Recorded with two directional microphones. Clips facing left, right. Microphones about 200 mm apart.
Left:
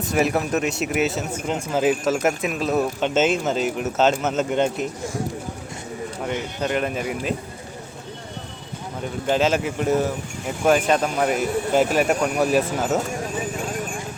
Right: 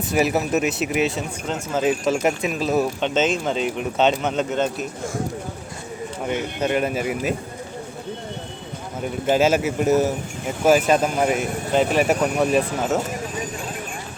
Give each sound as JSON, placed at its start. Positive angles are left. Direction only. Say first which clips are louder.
{"t": 0.1, "sound": "speech", "louder": "right 1 dB", "side_deg": -5}
{"t": 4.5, "sound": "speech", "louder": "left 2 dB", "side_deg": 15}
{"t": 6.6, "sound": "speech", "louder": "right 2 dB", "side_deg": -5}
{"t": 9.2, "sound": "speech", "louder": "right 2 dB", "side_deg": -10}